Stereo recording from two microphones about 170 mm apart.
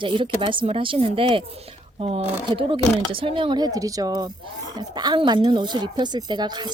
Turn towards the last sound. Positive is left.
turn(degrees=-25)  # may be behind; listen again after turning